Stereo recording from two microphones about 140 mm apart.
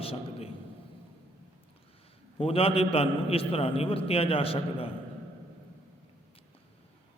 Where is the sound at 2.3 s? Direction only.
45° left (ahead or behind).